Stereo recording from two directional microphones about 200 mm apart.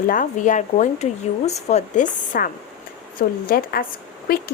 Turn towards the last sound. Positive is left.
turn(degrees=50)  # may be behind; listen again after turning